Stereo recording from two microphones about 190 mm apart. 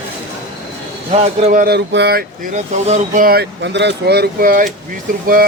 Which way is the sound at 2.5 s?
40° right (ahead or behind).